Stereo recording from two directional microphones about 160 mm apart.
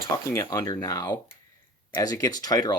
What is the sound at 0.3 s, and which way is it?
Speech, 20° left (ahead or behind).